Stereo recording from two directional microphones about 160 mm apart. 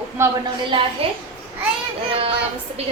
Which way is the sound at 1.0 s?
40° right (ahead or behind).